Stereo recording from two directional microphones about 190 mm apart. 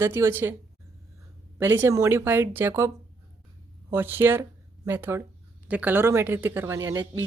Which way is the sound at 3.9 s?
10° right (ahead or behind).